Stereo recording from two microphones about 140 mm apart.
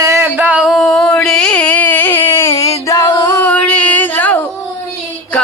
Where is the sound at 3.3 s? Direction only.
10° left (ahead or behind).